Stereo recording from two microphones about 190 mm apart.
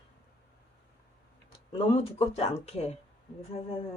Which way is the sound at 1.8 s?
30° left (ahead or behind).